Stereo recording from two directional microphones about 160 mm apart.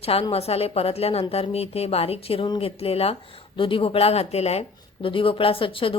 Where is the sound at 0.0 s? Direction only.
35° left (ahead or behind).